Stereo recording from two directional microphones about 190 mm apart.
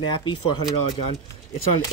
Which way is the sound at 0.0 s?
25° left (ahead or behind).